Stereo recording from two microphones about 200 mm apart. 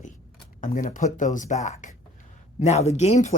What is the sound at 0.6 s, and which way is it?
Speech, 40° left (ahead or behind).